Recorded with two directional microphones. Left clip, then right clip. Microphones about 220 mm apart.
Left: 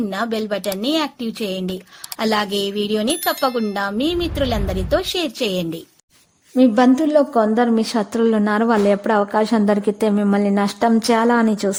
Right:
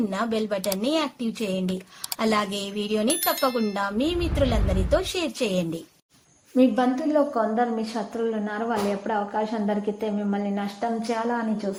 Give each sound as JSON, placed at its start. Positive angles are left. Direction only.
{"t": 0.1, "sound": "a woman's voice", "side_deg": 25}
{"t": 6.7, "sound": "a woman's voice", "side_deg": 45}